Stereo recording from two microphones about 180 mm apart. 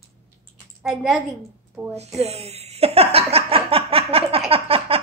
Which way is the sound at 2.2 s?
35° right (ahead or behind).